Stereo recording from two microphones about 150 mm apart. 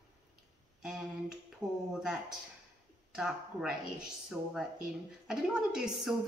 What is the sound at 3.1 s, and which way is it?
Speech, 5° right (ahead or behind).